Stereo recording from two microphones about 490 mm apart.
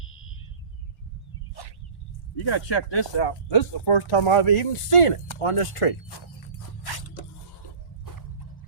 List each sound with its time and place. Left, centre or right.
1.6 s a sound: left
2.3 s speech: left
6.8 s scrape: left